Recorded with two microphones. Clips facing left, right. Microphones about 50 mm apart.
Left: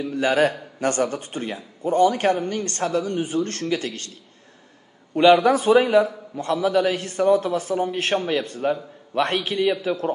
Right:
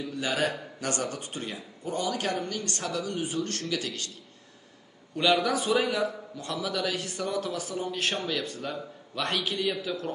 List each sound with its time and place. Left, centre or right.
0.0 s a man's voice: left
5.1 s a man's voice: left